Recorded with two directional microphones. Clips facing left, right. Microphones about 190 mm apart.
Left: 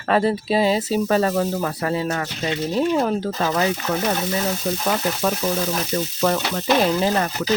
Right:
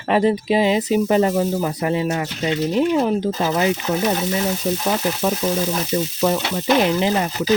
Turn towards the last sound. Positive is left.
turn(degrees=-15)  # may be behind; listen again after turning